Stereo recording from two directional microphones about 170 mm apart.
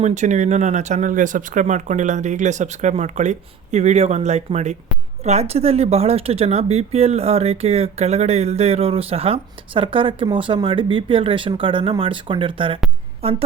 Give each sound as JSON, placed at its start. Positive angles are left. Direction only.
{"t": 0.0, "sound": "speech", "side_deg": -45}